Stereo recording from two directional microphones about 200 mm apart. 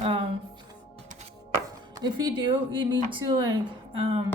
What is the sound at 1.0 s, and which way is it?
Music, 40° right (ahead or behind).